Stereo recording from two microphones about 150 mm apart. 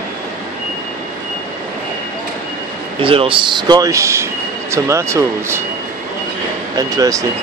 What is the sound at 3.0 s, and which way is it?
Speech, 35° right (ahead or behind).